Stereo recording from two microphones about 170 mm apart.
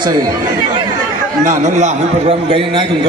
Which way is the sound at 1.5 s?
45° right (ahead or behind).